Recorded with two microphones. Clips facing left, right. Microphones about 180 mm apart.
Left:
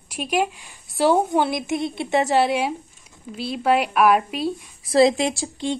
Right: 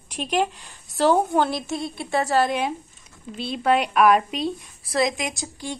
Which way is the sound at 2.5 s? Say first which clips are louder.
Left 2 dB; 10° left (ahead or behind).